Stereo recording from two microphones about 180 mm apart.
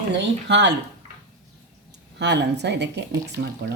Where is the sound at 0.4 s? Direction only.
75° right (ahead or behind).